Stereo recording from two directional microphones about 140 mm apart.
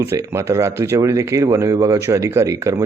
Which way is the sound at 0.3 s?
20° right (ahead or behind).